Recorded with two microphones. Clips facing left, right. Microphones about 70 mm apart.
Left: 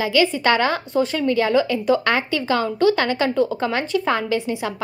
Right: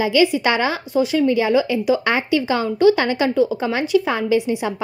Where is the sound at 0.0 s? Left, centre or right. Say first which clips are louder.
Right 2 dB; right.